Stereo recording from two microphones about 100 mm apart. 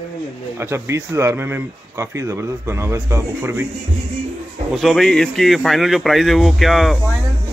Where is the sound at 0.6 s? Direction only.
25° right (ahead or behind).